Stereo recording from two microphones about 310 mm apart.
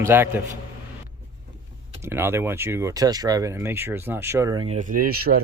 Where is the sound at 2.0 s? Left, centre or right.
Centre.